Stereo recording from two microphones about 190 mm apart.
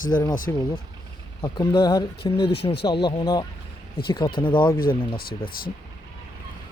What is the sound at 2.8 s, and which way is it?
Speech, 25° left (ahead or behind).